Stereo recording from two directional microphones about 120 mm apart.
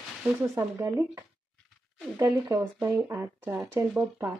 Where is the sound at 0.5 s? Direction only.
20° right (ahead or behind).